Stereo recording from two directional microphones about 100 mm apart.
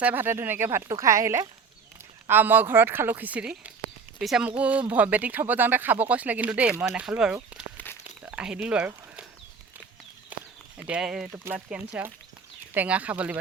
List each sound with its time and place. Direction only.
0.0 s speech: 20° right (ahead or behind)
2.2 s speech: 20° right (ahead or behind)
4.2 s speech: centre (ahead or behind)
4.4 s speech: 15° right (ahead or behind)
8.0 s a sound: 15° right (ahead or behind)
10.8 s speech: 10° right (ahead or behind)